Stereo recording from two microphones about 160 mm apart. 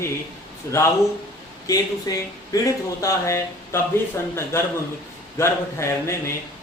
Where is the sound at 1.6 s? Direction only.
20° left (ahead or behind).